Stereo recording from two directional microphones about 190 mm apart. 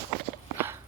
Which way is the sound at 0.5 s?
10° right (ahead or behind).